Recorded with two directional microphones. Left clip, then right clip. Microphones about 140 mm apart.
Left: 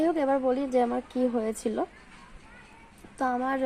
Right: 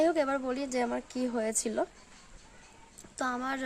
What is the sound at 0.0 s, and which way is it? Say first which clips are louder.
Speech: left 3 dB; 25° right (ahead or behind).